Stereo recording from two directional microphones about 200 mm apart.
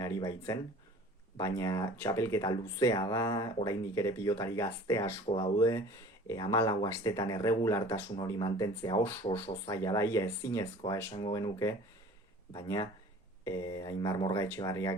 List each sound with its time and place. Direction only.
0.0 s speech: 15° left (ahead or behind)